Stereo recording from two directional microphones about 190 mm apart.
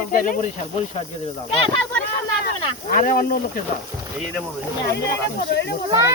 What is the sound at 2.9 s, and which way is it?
Speech, 45° left (ahead or behind).